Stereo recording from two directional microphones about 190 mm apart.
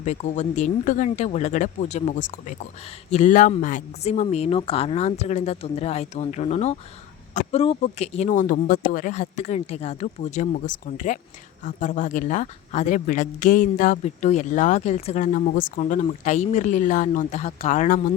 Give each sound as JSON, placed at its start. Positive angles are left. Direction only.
{"t": 0.0, "sound": "speech", "side_deg": 40}